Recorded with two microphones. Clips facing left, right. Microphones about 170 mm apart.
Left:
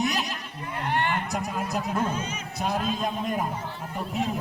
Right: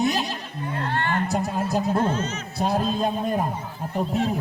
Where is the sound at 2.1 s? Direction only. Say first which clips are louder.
Right 5 dB; 10° left (ahead or behind).